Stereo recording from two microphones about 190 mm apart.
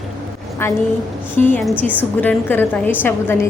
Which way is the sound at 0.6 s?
15° left (ahead or behind).